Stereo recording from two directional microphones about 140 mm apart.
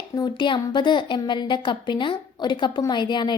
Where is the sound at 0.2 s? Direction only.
35° left (ahead or behind).